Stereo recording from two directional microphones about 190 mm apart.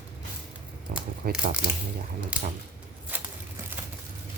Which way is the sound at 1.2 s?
50° right (ahead or behind).